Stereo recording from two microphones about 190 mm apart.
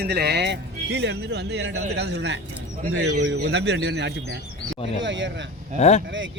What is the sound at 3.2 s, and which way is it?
Speech, 65° right (ahead or behind).